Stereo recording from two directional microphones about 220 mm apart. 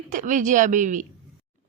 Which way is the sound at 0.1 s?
35° right (ahead or behind).